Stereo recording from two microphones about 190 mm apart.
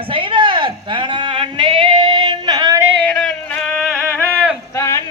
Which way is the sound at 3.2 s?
5° left (ahead or behind).